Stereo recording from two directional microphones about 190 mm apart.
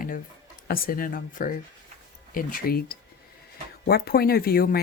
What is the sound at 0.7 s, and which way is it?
Speech, 50° left (ahead or behind).